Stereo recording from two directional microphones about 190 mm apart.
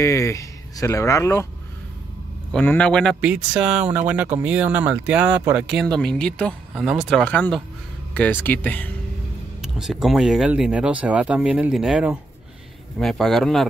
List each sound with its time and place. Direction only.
0.0 s speech: 15° left (ahead or behind)
2.5 s speech: 10° left (ahead or behind)
9.6 s speech: centre (ahead or behind)